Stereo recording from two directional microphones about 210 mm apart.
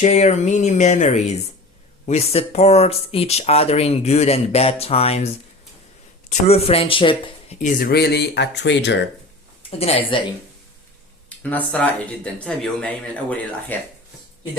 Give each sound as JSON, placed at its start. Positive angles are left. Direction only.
{"t": 0.0, "sound": "speech", "side_deg": 35}
{"t": 7.6, "sound": "speech", "side_deg": 45}
{"t": 9.6, "sound": "speech", "side_deg": 30}
{"t": 11.3, "sound": "speech", "side_deg": 5}